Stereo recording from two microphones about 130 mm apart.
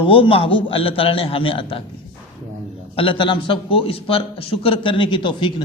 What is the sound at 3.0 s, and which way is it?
A man's voice, 40° left (ahead or behind).